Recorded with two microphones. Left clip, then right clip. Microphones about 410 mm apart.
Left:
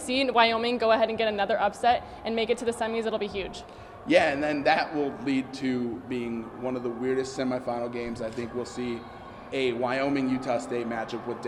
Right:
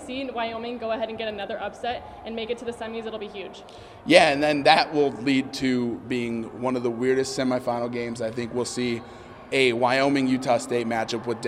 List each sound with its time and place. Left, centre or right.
0.1 s a woman's voice: left
4.0 s a man's voice: right